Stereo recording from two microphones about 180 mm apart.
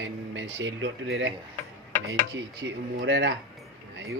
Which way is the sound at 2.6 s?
90° right.